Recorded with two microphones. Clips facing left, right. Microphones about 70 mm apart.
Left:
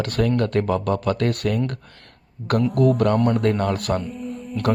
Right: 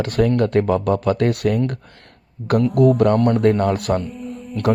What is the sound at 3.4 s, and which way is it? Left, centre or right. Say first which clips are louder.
Speech: right 4 dB; right.